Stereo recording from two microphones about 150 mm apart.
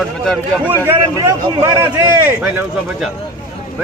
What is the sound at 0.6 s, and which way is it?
A man's voice, 15° right (ahead or behind).